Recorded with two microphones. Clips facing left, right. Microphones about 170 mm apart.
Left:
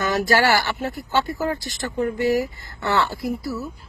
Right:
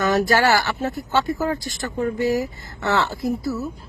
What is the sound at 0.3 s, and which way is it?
A woman's voice, 20° right (ahead or behind).